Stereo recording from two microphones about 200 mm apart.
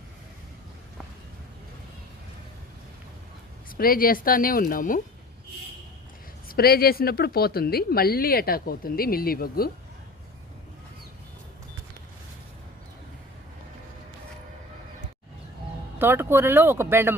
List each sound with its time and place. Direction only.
3.8 s a woman's voice: 45° left (ahead or behind)
6.5 s a woman's voice: 50° left (ahead or behind)
16.0 s speech: 10° right (ahead or behind)